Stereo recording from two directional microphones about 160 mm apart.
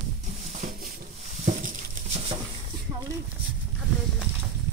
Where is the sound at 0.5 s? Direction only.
50° right (ahead or behind).